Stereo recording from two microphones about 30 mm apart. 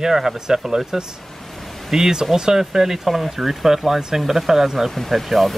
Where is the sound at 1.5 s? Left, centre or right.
Centre.